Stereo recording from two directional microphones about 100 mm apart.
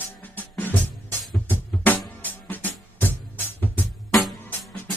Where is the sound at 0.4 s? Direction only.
20° left (ahead or behind).